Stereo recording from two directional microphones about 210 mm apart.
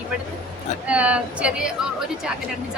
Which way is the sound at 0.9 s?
5° right (ahead or behind).